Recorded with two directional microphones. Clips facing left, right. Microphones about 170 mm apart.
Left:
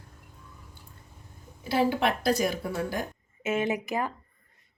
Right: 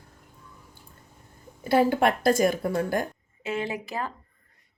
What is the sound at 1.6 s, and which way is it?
A woman's voice, 50° right (ahead or behind).